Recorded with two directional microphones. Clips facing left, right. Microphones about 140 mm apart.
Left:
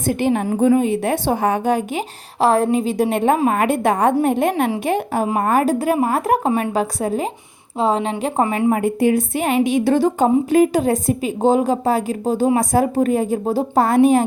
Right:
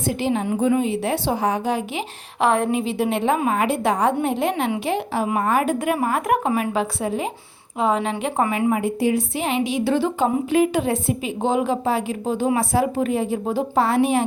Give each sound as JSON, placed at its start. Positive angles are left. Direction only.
{"t": 0.1, "sound": "a woman's voice", "side_deg": 55}
{"t": 8.7, "sound": "a woman's voice", "side_deg": 50}